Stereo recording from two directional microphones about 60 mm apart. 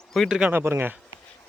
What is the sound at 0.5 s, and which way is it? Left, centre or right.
Speech, right.